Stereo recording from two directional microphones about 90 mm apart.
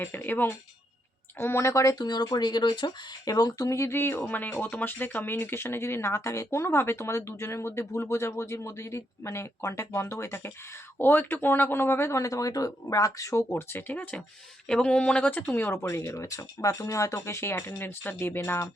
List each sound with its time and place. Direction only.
0.0 s speech: 20° left (ahead or behind); by 3.3 s 60° left (ahead or behind)
3.3 s speech: 45° left (ahead or behind); by 18.7 s 30° left (ahead or behind)